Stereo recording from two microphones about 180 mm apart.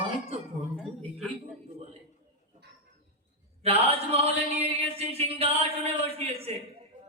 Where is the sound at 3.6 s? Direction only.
35° right (ahead or behind).